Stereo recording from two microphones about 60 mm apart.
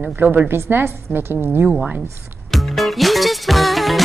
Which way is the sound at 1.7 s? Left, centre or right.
Centre.